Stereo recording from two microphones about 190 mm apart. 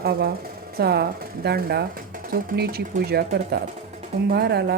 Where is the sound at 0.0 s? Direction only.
55° right (ahead or behind).